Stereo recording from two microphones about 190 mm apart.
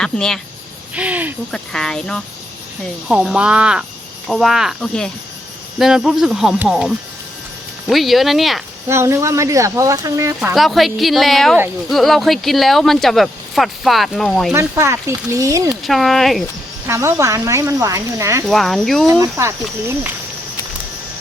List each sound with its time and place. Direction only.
0.0 s speech: 5° left (ahead or behind)
0.9 s speech: 10° right (ahead or behind)
1.5 s speech: 5° left (ahead or behind)
8.9 s speech: 15° right (ahead or behind)
10.5 s speech: centre (ahead or behind)
14.5 s speech: 15° right (ahead or behind)
15.7 s speech: centre (ahead or behind)
16.8 s speech: 15° right (ahead or behind)
18.4 s speech: centre (ahead or behind)
19.2 s speech: 15° right (ahead or behind)